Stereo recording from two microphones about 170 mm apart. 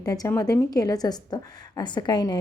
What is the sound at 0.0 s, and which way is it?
A woman's voice, 20° left (ahead or behind).